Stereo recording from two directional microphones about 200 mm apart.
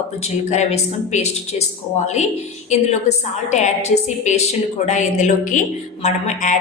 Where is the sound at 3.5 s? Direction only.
35° left (ahead or behind).